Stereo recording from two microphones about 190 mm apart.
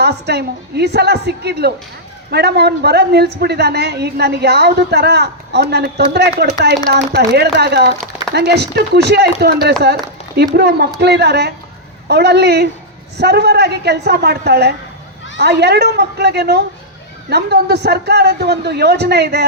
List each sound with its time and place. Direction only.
0.0 s a woman's voice: 60° right (ahead or behind)
9.8 s run: 60° right (ahead or behind)
10.5 s a woman's voice: 60° right (ahead or behind)